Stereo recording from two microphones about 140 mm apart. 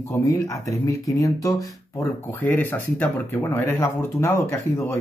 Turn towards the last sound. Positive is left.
turn(degrees=15)  # may be behind; listen again after turning